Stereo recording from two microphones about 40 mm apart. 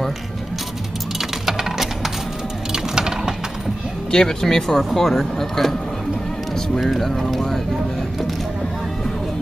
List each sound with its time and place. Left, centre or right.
1.4 s a sound: centre
2.7 s music: centre
4.1 s speech: centre
6.8 s speech: centre